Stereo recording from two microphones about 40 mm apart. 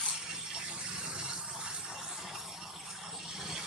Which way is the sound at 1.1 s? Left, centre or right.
Right.